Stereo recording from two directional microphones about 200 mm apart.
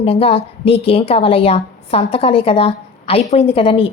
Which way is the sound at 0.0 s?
30° left (ahead or behind).